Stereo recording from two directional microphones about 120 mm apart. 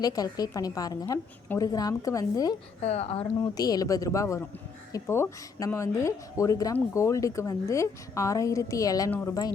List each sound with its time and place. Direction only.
0.0 s a woman's voice: 30° left (ahead or behind)
2.8 s speech: 60° left (ahead or behind)
3.4 s a woman's voice: 30° left (ahead or behind)
9.0 s speech: 15° left (ahead or behind)